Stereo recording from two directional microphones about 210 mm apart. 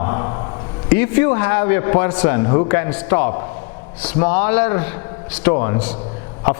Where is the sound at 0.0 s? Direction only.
25° left (ahead or behind).